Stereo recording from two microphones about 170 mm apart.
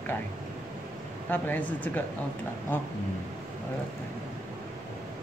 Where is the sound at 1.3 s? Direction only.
10° left (ahead or behind).